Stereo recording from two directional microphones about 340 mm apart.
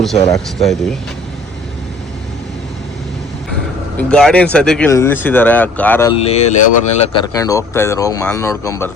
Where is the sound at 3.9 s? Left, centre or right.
Centre.